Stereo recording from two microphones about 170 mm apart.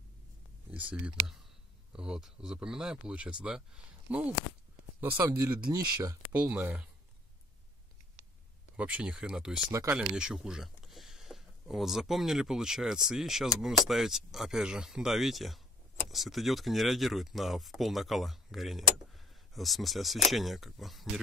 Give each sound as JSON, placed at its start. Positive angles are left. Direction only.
{"t": 0.8, "sound": "speech", "side_deg": -5}
{"t": 5.4, "sound": "speech", "side_deg": -20}
{"t": 6.3, "sound": "speech", "side_deg": -10}
{"t": 8.7, "sound": "speech", "side_deg": -10}
{"t": 9.7, "sound": "speech", "side_deg": -15}
{"t": 9.9, "sound": "speech", "side_deg": -5}